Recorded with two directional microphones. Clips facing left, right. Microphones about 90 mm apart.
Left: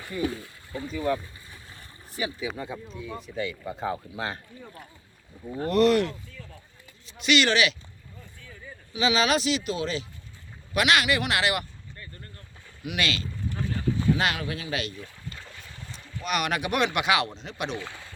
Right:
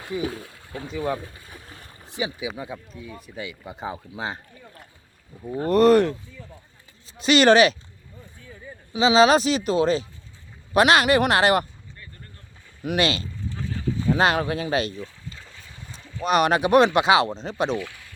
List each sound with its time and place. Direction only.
0.3 s speech: 60° right (ahead or behind)
0.9 s speech: 25° right (ahead or behind)
1.2 s a sound: 50° right (ahead or behind)
2.0 s speech: 20° right (ahead or behind)
2.5 s speech: 5° right (ahead or behind); by 4.4 s 20° right (ahead or behind)
5.5 s speech: 35° right (ahead or behind)
7.2 s speech: 35° right (ahead or behind)
8.4 s speech: 20° right (ahead or behind); by 11.6 s 40° right (ahead or behind)
12.8 s speech: 40° right (ahead or behind)
15.0 s boat: centre (ahead or behind)
16.2 s speech: 35° right (ahead or behind)
17.7 s speech: 25° left (ahead or behind)